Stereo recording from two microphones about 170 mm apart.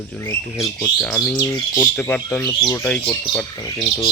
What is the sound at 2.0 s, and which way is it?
Speech, 10° left (ahead or behind).